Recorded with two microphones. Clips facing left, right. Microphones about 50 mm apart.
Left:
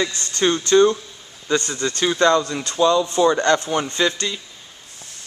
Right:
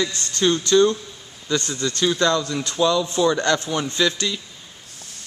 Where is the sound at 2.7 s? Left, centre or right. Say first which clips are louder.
Left 3 dB; centre.